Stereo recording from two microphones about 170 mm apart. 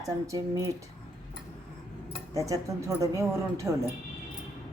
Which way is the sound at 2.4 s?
20° right (ahead or behind).